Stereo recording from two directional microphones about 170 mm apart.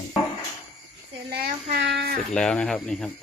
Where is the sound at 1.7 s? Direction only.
75° right (ahead or behind).